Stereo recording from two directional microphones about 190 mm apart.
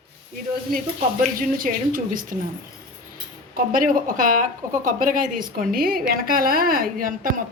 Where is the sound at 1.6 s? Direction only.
45° right (ahead or behind).